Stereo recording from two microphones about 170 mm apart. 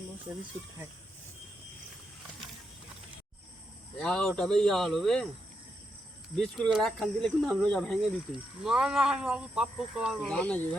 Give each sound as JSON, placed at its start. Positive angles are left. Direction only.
{"t": 4.0, "sound": "speech", "side_deg": 5}
{"t": 6.3, "sound": "speech", "side_deg": 0}